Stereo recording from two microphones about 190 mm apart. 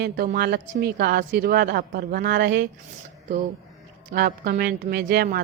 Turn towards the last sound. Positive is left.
turn(degrees=-50)  # may be behind; listen again after turning